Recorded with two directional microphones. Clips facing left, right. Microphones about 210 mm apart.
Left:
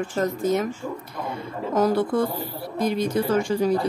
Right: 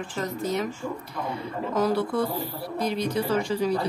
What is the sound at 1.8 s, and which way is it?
A woman's voice, 45° left (ahead or behind).